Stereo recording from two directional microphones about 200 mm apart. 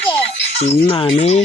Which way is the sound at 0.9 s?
30° left (ahead or behind).